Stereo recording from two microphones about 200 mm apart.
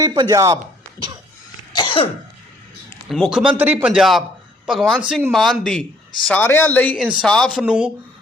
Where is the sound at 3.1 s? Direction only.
Centre (ahead or behind).